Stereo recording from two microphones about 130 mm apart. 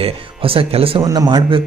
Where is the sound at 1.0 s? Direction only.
30° right (ahead or behind).